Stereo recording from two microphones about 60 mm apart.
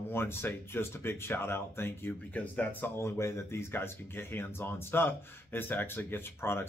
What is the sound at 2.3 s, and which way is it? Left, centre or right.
Speech, left.